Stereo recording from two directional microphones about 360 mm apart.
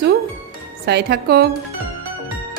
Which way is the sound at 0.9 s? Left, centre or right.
Right.